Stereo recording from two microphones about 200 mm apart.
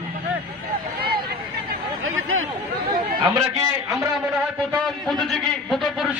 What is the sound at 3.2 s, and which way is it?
Speech, 20° right (ahead or behind).